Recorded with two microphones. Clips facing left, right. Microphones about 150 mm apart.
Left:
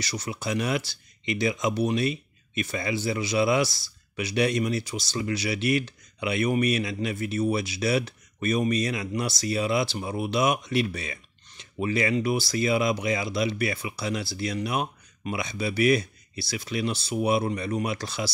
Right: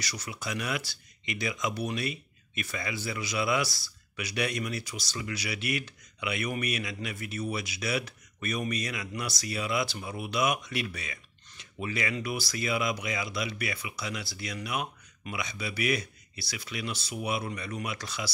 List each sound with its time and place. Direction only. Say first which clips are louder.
0.0 s speech: left 6 dB; 25° left (ahead or behind)